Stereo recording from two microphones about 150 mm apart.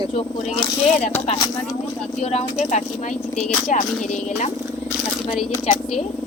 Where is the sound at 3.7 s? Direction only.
55° left (ahead or behind).